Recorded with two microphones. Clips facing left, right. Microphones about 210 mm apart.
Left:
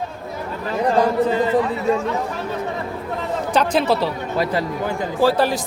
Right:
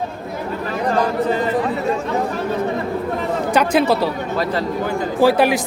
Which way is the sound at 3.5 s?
10° right (ahead or behind).